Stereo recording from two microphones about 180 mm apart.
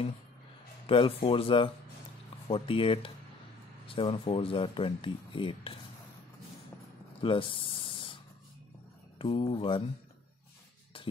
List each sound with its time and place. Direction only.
0.8 s speech: 30° left (ahead or behind)
7.2 s spray: 30° left (ahead or behind)
9.2 s speech: 30° left (ahead or behind)